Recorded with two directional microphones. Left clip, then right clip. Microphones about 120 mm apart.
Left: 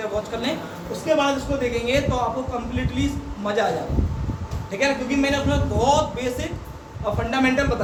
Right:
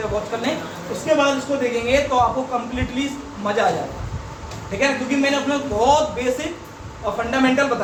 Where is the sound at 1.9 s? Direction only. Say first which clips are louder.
Right 5 dB; 15° right (ahead or behind).